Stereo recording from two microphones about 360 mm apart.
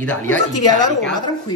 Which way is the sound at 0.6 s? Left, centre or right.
Centre.